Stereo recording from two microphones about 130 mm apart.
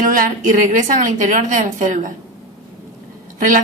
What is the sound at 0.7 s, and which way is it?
A woman's voice, 75° right (ahead or behind).